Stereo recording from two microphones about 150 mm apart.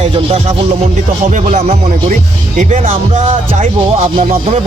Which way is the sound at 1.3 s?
50° right (ahead or behind).